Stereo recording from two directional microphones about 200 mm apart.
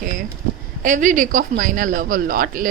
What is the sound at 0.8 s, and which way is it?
A woman's voice, 40° right (ahead or behind).